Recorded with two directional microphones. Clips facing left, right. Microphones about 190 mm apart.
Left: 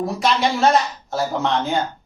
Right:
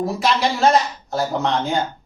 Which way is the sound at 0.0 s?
Centre (ahead or behind).